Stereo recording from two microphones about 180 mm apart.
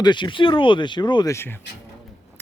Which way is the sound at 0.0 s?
25° left (ahead or behind).